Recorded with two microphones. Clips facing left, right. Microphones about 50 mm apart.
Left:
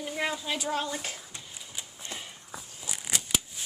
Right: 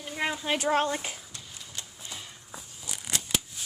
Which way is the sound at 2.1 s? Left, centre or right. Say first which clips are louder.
Left 2 dB; left.